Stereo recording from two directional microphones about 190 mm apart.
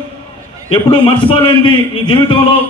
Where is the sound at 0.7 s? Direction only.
30° left (ahead or behind).